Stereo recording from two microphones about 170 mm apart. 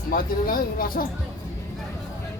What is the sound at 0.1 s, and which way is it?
Speech, 55° left (ahead or behind).